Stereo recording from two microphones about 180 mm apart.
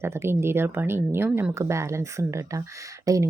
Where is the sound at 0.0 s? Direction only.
15° right (ahead or behind).